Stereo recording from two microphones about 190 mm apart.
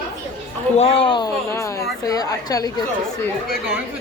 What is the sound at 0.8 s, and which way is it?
A woman's voice, 30° left (ahead or behind).